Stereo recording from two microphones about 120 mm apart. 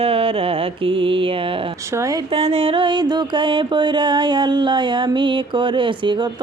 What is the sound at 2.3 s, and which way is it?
Music, 55° right (ahead or behind).